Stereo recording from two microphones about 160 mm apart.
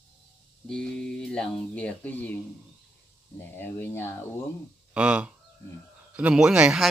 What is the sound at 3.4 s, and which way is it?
Speech, 15° left (ahead or behind).